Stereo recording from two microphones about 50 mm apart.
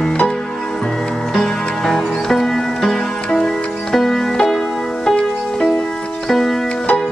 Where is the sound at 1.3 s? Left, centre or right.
Centre.